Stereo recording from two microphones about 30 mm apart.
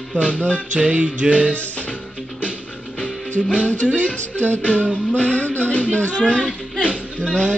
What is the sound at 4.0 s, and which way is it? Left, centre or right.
Speech, left.